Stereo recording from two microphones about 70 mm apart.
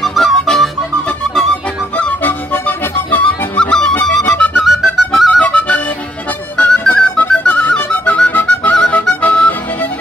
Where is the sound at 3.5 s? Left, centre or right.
Centre.